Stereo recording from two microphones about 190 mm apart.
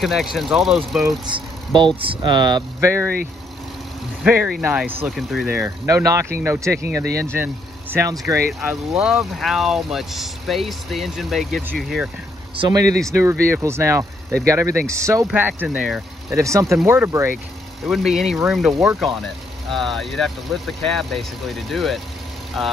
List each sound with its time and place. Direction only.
0.0 s speech: centre (ahead or behind)
1.3 s speech: 25° right (ahead or behind)
4.2 s speech: 5° right (ahead or behind)
5.5 s speech: 15° right (ahead or behind)
8.5 s speech: centre (ahead or behind)
12.5 s speech: 25° right (ahead or behind)
17.8 s speech: centre (ahead or behind)